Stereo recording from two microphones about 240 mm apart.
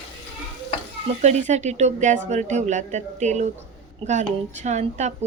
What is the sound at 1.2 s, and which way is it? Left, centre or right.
Speech, right.